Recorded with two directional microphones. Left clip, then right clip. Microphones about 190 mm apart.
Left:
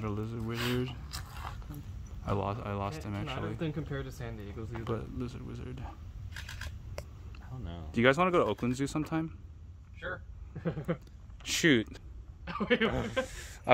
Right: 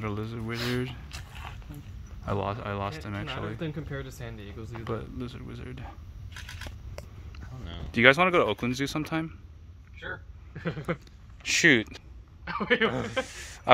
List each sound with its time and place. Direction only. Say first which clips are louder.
0.0 s speech: right 3 dB; 5° left (ahead or behind)
0.7 s a sound: right 2 dB; centre (ahead or behind)
2.2 s speech: right 3 dB; centre (ahead or behind)
7.0 s a sound: left 1 dB; centre (ahead or behind)
7.9 s speech: right 6 dB; centre (ahead or behind)
10.6 s a sound: right 3 dB; 10° right (ahead or behind)
11.4 s speech: right 6 dB; 10° left (ahead or behind)
12.4 s speech: right 4 dB; 30° right (ahead or behind)
13.3 s speech: right 5 dB; 5° left (ahead or behind)